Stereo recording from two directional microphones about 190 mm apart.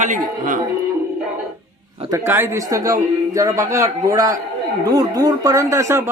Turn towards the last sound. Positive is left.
turn(degrees=-15)  # may be behind; listen again after turning